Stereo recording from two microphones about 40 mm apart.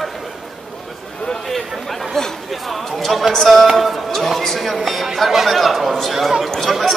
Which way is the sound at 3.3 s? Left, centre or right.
Centre.